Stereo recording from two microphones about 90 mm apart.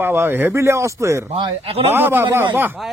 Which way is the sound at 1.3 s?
75° right (ahead or behind).